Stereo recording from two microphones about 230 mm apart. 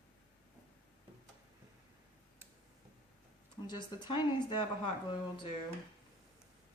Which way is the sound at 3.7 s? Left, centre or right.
Centre.